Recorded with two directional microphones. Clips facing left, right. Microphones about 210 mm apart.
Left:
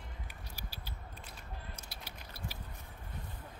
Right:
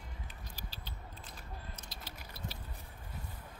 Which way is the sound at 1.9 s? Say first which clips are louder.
Even; 10° left (ahead or behind).